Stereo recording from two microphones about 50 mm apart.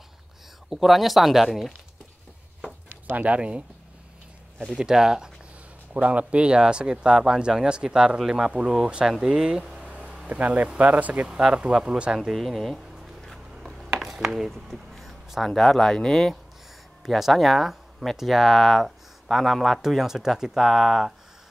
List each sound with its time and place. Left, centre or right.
0.7 s speech: centre
3.1 s speech: right
4.7 s speech: centre
5.9 s speech: right
9.8 s a sound: right
10.8 s speech: right
11.2 s speech: centre
12.2 s a sound: centre
13.6 s speech: centre
17.0 s speech: centre